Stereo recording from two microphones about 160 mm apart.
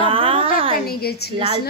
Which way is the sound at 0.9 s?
75° left (ahead or behind).